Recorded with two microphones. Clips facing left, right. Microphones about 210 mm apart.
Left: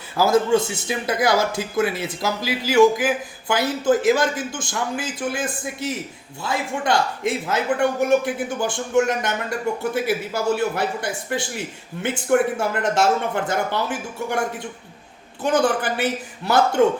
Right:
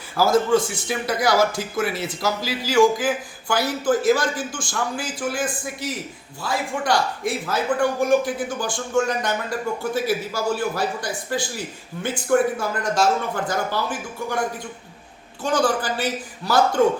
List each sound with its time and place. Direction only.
0.2 s speech: 25° left (ahead or behind)
12.0 s speech: 25° left (ahead or behind)
15.4 s speech: 20° left (ahead or behind)